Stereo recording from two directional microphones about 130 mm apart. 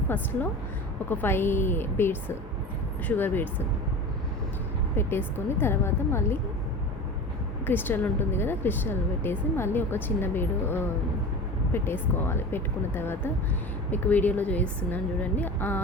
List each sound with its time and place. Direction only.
1.1 s speech: 15° left (ahead or behind)
4.9 s a woman's voice: 20° left (ahead or behind)
7.7 s speech: 15° left (ahead or behind)